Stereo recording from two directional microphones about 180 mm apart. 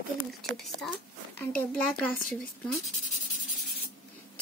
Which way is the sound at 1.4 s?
10° left (ahead or behind).